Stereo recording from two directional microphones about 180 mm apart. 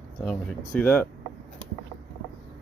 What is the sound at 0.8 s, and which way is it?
Speech, 10° left (ahead or behind).